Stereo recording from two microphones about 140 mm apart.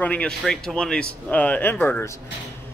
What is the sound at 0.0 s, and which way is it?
A man's voice, 10° left (ahead or behind).